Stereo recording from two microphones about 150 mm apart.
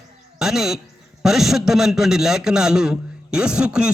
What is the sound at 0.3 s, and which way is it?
A man's voice, 5° right (ahead or behind).